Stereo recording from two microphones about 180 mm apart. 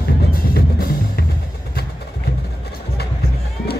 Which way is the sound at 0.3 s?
55° left (ahead or behind).